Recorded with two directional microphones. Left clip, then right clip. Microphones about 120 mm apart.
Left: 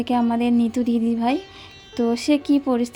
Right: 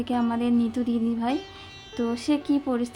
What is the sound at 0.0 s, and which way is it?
A woman's voice, 35° left (ahead or behind).